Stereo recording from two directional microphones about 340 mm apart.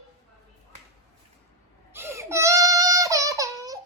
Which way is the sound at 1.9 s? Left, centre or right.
Centre.